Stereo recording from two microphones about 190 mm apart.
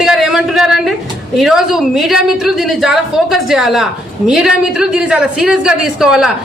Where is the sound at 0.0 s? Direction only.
Centre (ahead or behind).